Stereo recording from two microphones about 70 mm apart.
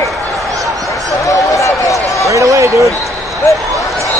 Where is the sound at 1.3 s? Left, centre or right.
Left.